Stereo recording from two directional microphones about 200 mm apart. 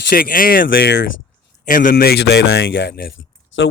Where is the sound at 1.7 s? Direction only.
45° left (ahead or behind).